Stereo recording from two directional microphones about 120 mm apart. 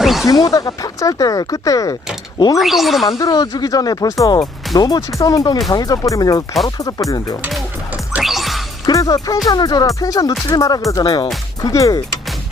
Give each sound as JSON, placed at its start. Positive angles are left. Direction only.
{"t": 0.0, "sound": "a sound", "side_deg": 0}
{"t": 0.3, "sound": "speech", "side_deg": 30}
{"t": 2.6, "sound": "speech", "side_deg": 0}
{"t": 3.1, "sound": "speech", "side_deg": 30}
{"t": 8.2, "sound": "music", "side_deg": 0}
{"t": 8.9, "sound": "speech", "side_deg": 30}